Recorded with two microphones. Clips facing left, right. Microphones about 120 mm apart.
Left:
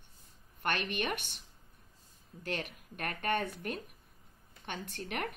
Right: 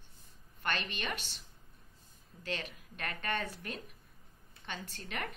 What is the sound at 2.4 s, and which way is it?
A woman's voice, 55° left (ahead or behind).